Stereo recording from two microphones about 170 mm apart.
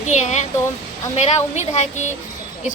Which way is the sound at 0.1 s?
45° left (ahead or behind).